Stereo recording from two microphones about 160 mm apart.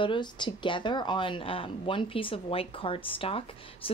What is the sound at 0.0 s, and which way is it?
Speech, 30° left (ahead or behind).